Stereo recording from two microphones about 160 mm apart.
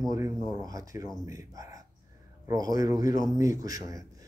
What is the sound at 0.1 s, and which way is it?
Speech, 20° right (ahead or behind).